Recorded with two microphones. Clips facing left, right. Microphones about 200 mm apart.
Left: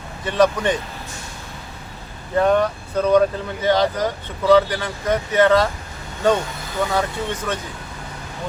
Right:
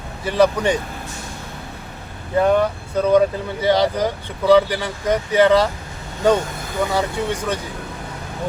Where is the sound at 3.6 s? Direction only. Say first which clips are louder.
Right 1 dB; 10° right (ahead or behind).